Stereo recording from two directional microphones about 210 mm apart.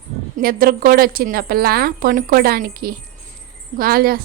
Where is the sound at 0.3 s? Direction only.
45° right (ahead or behind).